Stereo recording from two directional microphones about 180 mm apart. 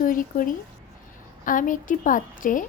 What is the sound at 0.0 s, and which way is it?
A woman's voice, 50° left (ahead or behind).